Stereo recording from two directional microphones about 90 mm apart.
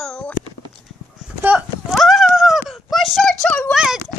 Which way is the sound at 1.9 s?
Centre (ahead or behind).